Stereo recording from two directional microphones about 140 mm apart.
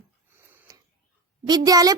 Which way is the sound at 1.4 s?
30° right (ahead or behind).